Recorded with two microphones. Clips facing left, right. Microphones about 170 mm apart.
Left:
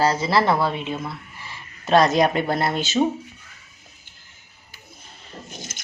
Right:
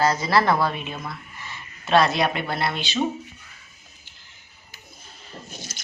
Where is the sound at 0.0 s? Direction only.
30° left (ahead or behind).